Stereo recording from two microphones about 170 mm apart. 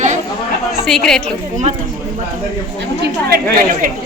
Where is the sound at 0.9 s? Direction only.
5° left (ahead or behind).